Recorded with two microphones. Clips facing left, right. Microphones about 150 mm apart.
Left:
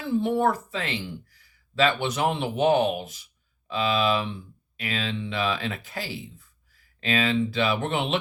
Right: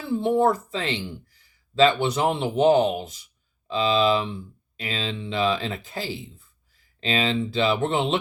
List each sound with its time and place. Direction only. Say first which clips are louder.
0.2 s speech: right 4 dB; 30° right (ahead or behind)